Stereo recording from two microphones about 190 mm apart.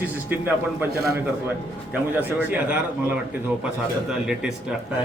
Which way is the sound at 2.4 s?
5° right (ahead or behind).